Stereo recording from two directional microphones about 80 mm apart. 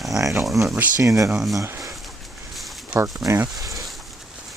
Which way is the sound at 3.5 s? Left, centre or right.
Right.